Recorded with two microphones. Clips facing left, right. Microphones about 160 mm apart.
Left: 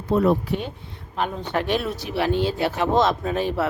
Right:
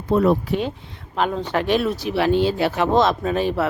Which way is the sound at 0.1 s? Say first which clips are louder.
Right 2 dB; 90° right.